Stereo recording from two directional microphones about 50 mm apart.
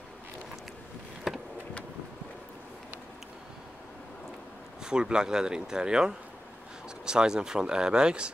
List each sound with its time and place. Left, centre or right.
1.3 s vehicle: centre
4.8 s speech: centre